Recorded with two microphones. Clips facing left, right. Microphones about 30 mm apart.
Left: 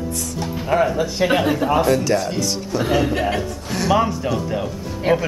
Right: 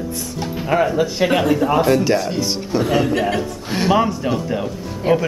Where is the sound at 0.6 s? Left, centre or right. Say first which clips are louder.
Right 1 dB; centre.